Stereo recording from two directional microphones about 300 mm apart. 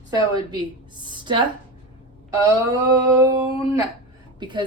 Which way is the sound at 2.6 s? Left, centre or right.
Centre.